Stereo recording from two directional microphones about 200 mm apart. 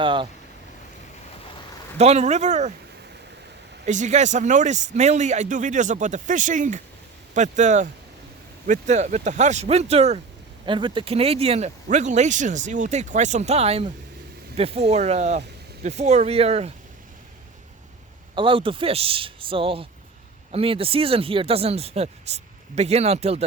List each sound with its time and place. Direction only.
0.0 s speech: 25° right (ahead or behind)
2.0 s speech: 35° right (ahead or behind)
3.8 s speech: 35° right (ahead or behind)
18.3 s speech: 25° right (ahead or behind)